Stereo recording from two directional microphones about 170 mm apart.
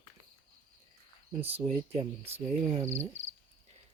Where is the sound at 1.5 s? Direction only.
35° right (ahead or behind).